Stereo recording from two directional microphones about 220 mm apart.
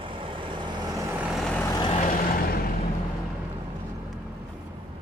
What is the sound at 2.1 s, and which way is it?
Vehicle, 40° left (ahead or behind).